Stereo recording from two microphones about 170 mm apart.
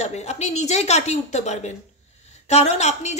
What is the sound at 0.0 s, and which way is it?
Speech, 40° left (ahead or behind).